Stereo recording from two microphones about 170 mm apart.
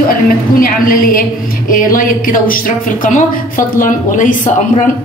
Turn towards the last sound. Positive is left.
turn(degrees=55)  # may be behind; listen again after turning